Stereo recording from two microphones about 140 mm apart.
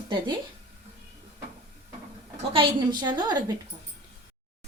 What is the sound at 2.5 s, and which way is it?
Speech, 35° right (ahead or behind).